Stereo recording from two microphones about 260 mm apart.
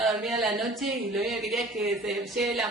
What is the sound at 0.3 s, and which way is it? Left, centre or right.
Speech, centre.